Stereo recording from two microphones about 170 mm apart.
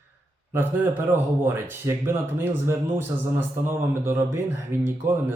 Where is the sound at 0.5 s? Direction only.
15° right (ahead or behind).